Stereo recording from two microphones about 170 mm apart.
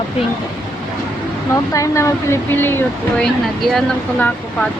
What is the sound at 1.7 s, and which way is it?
Speech, 20° left (ahead or behind).